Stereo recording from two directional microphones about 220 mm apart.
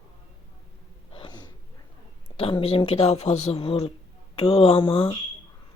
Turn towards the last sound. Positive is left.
turn(degrees=25)  # may be behind; listen again after turning